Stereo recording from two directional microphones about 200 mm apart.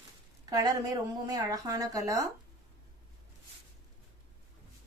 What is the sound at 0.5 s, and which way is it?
Speech, 15° right (ahead or behind).